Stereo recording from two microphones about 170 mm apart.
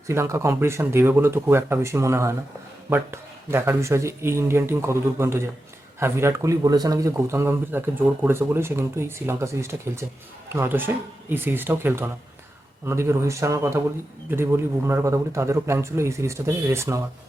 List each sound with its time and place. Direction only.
0.1 s a man's voice: 15° right (ahead or behind)